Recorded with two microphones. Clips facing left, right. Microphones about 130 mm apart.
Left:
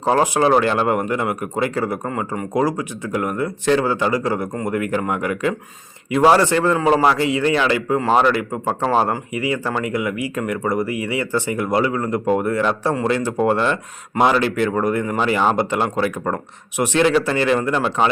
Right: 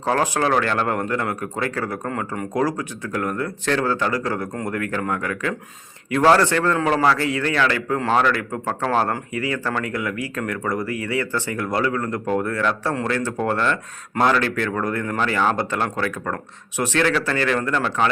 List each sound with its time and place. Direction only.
0.0 s speech: 15° left (ahead or behind)